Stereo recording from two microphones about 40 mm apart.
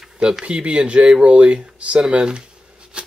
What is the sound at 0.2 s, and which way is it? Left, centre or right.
Speech, right.